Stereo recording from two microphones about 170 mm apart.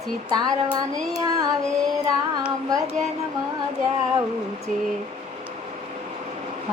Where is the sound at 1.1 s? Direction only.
20° right (ahead or behind).